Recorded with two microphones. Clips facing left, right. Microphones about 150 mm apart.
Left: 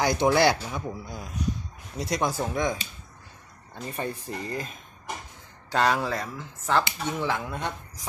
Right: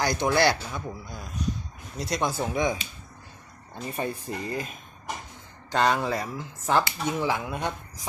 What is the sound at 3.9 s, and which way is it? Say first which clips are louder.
Speech: right 1 dB; 15° right (ahead or behind).